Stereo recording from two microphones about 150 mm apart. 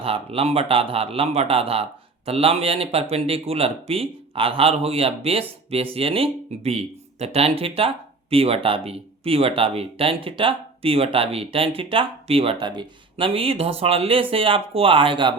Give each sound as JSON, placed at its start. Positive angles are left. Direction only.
{"t": 0.0, "sound": "a man's voice", "side_deg": -40}